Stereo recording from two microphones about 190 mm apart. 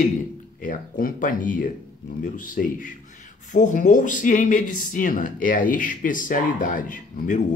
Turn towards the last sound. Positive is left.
turn(degrees=40)  # may be behind; listen again after turning